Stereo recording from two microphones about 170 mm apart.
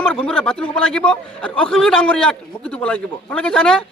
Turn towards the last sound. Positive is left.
turn(degrees=5)  # may be behind; listen again after turning